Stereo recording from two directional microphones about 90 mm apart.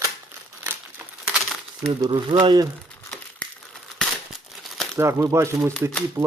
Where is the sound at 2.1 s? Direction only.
65° right (ahead or behind).